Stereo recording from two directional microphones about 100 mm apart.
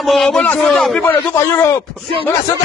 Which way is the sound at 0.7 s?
Centre (ahead or behind).